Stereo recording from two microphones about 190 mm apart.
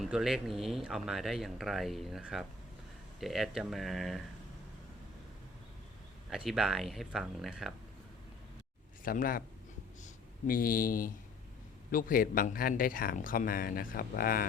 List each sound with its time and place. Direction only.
0.0 s speech: centre (ahead or behind)
6.3 s speech: centre (ahead or behind)
9.0 s speech: 50° left (ahead or behind)